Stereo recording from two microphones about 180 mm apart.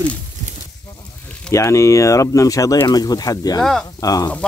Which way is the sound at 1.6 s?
15° left (ahead or behind).